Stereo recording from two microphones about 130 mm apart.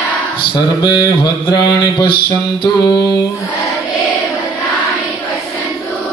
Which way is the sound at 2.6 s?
30° left (ahead or behind).